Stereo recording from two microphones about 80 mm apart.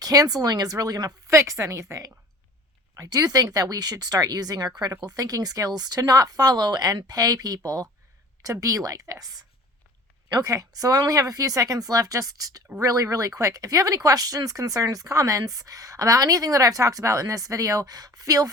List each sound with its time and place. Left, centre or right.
0.0 s speech: right
1.3 s a woman's voice: right